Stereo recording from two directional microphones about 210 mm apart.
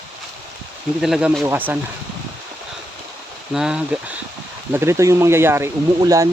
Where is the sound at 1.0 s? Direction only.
5° right (ahead or behind).